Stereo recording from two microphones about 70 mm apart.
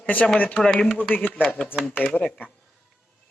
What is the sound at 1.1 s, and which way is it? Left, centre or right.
Speech, left.